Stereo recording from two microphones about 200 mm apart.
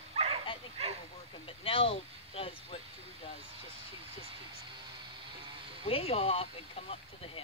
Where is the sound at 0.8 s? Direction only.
30° right (ahead or behind).